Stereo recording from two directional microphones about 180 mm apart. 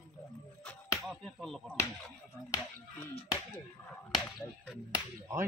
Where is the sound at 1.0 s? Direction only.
Centre (ahead or behind).